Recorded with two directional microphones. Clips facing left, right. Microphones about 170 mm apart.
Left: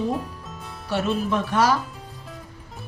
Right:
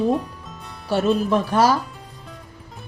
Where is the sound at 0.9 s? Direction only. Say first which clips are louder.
Right 5 dB; 35° right (ahead or behind).